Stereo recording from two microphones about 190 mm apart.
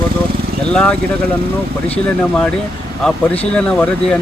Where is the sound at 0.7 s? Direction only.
5° left (ahead or behind).